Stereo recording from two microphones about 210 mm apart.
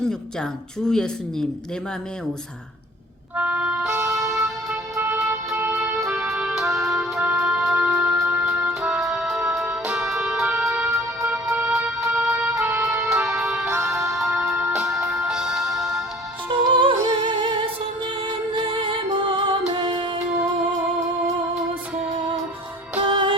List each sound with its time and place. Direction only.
0.9 s speech: 5° left (ahead or behind)
3.3 s music: 5° right (ahead or behind)
4.3 s music: centre (ahead or behind)
10.7 s music: 15° right (ahead or behind)
13.9 s music: 15° right (ahead or behind)
14.2 s music: centre (ahead or behind)
16.5 s music: 25° right (ahead or behind)
23.0 s music: 25° right (ahead or behind)